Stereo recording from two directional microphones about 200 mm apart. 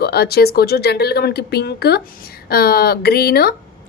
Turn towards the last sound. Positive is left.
turn(degrees=50)  # may be behind; listen again after turning